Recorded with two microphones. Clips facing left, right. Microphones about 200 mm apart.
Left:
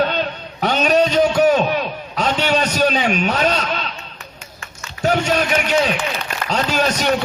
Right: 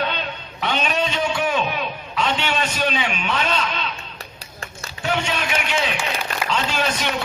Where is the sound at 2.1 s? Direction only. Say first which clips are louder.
Left 5 dB; 40° left (ahead or behind).